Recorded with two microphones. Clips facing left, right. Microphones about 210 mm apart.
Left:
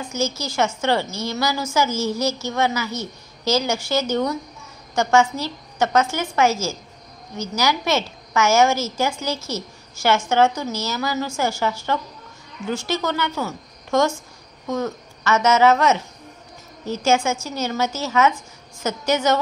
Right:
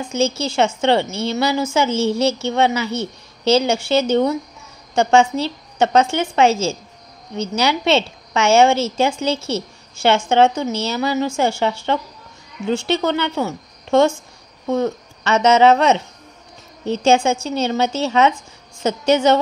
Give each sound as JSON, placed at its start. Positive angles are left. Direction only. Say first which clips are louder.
{"t": 0.1, "sound": "a woman's voice", "louder": "right 6 dB", "side_deg": -30}
{"t": 17.0, "sound": "a woman's voice", "louder": "right 4 dB", "side_deg": -30}